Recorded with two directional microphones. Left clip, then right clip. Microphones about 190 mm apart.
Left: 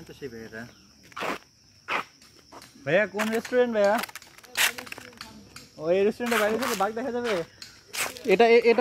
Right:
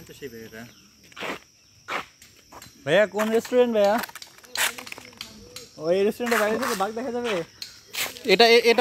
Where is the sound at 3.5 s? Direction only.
45° right (ahead or behind).